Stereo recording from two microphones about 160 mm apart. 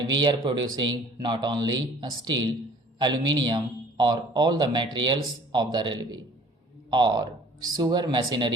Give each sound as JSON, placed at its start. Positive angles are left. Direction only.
{"t": 0.1, "sound": "speech", "side_deg": -25}